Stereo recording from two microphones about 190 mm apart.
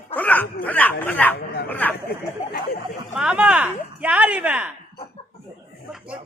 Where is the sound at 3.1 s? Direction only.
5° right (ahead or behind).